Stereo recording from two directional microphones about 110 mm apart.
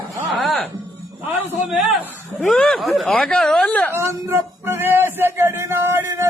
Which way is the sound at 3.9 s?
20° right (ahead or behind).